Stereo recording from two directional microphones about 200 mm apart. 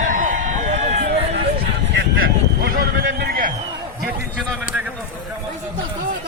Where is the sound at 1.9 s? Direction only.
50° right (ahead or behind).